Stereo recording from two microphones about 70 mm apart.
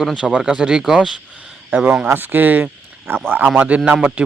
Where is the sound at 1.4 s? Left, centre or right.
Centre.